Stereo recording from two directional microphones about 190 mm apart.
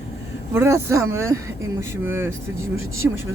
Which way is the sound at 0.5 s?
15° right (ahead or behind).